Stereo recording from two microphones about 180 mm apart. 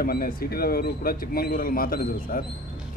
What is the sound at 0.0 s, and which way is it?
A man's voice, 55° left (ahead or behind).